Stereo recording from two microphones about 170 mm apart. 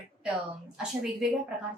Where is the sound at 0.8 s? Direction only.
5° right (ahead or behind).